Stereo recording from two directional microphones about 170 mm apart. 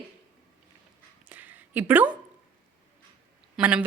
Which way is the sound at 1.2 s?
10° right (ahead or behind).